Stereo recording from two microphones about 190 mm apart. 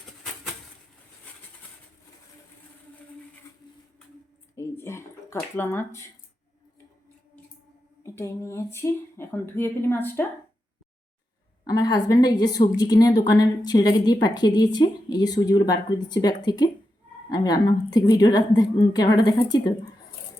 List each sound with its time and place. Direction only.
4.5 s speech: 15° left (ahead or behind)
8.0 s speech: 15° left (ahead or behind)
11.6 s a woman's voice: 20° left (ahead or behind)